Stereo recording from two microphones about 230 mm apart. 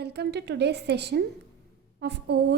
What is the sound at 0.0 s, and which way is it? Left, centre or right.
A woman's voice, right.